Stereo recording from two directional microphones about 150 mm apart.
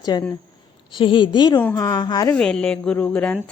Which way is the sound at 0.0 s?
25° left (ahead or behind).